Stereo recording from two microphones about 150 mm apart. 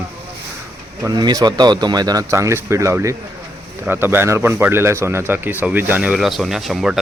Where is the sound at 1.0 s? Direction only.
25° right (ahead or behind).